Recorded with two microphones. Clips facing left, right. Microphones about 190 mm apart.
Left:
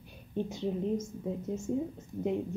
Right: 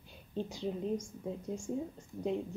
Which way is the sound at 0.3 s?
20° left (ahead or behind).